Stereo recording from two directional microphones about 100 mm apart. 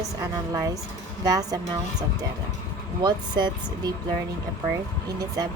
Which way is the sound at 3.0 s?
45° right (ahead or behind).